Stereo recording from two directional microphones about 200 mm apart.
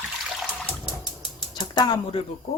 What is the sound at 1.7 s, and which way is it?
Speech, 20° left (ahead or behind).